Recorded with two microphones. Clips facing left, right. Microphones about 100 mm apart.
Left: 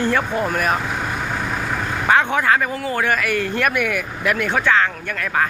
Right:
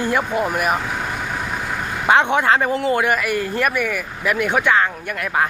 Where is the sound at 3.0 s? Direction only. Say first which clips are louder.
Even; 10° right (ahead or behind).